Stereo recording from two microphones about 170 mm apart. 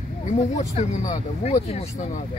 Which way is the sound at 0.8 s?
40° left (ahead or behind).